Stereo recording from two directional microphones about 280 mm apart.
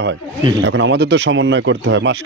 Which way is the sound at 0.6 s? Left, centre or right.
Right.